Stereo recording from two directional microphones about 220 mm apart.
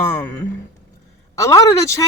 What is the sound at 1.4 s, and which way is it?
Speech, 15° left (ahead or behind).